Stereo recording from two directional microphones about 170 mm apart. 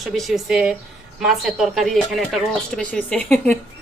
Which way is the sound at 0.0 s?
Centre (ahead or behind).